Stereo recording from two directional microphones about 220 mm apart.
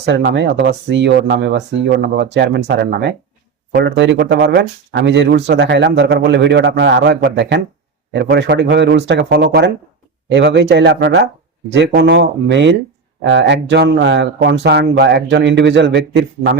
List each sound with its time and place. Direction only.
0.0 s speech: 50° right (ahead or behind)